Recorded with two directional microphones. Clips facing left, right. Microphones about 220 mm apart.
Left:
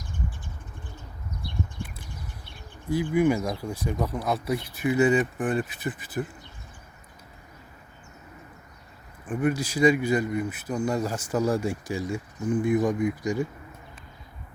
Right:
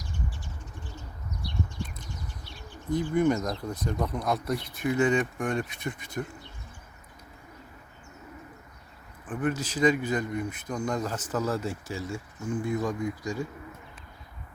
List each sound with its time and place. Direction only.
0.9 s bird: 55° left (ahead or behind)
2.9 s speech: 10° left (ahead or behind)
9.2 s speech: 10° left (ahead or behind)